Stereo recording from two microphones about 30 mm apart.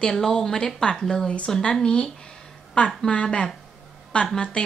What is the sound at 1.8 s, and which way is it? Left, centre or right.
A woman's voice, left.